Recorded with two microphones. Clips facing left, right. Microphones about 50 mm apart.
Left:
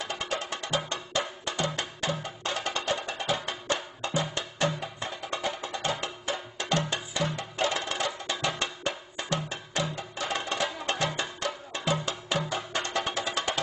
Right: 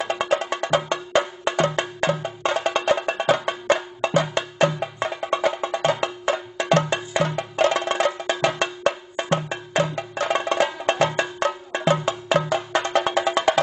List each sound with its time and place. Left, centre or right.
0.0 s music: right
4.0 s music: right
5.9 s music: right
11.7 s music: right
12.3 s music: right
12.8 s music: right